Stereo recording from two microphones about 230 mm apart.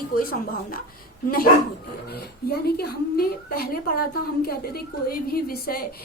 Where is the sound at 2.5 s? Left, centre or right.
Left.